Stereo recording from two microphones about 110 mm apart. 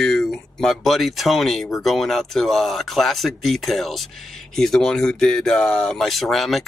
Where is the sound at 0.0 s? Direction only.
5° left (ahead or behind).